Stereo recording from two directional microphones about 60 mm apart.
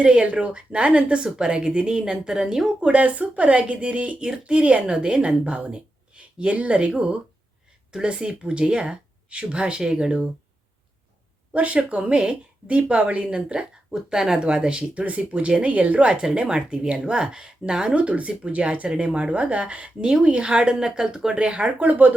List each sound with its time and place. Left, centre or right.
0.0 s speech: centre
11.5 s speech: right